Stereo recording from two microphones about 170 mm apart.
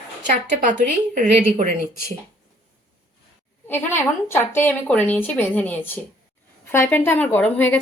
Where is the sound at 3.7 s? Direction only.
15° left (ahead or behind).